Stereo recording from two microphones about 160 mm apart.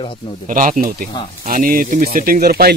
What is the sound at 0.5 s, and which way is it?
Speech, 55° right (ahead or behind).